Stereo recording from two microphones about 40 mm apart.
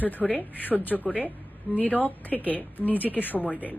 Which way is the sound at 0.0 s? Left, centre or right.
Left.